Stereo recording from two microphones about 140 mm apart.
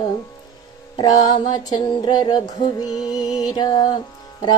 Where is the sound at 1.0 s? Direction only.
30° left (ahead or behind).